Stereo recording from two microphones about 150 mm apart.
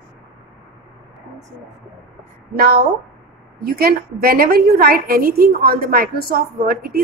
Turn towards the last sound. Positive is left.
turn(degrees=-80)